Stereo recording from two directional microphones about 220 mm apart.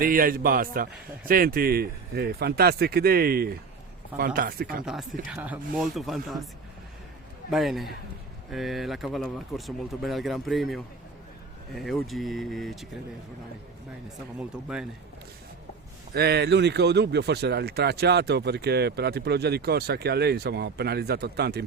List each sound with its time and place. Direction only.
0.0 s speech: 40° right (ahead or behind)
5.3 s speech: 5° right (ahead or behind)
7.5 s speech: centre (ahead or behind)
14.3 s speech: 5° right (ahead or behind)
16.1 s speech: 45° right (ahead or behind)